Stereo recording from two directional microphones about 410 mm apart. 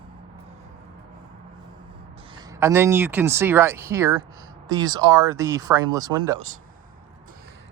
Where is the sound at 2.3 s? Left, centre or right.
Centre.